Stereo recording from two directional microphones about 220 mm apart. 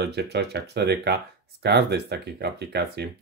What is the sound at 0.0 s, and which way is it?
Speech, 50° right (ahead or behind).